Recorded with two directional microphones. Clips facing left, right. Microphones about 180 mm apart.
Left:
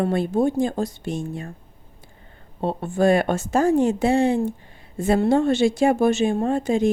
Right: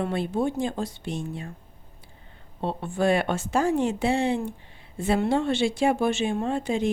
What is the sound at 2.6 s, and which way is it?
A woman's voice, 45° left (ahead or behind).